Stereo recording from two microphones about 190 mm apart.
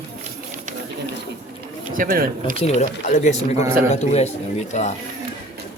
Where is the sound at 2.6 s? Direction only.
35° left (ahead or behind).